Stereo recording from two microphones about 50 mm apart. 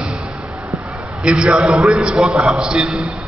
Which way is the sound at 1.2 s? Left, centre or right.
Right.